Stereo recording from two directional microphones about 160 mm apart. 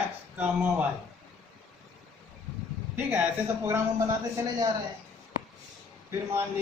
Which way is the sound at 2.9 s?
15° right (ahead or behind).